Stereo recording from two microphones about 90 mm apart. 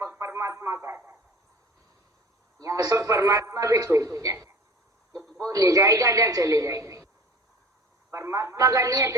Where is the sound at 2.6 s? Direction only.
40° right (ahead or behind).